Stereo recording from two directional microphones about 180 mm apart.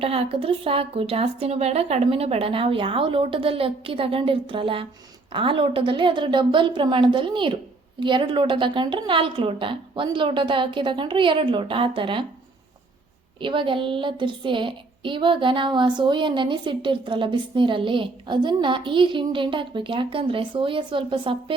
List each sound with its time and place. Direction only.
0.0 s a woman's voice: 30° right (ahead or behind)
13.4 s a woman's voice: 30° right (ahead or behind)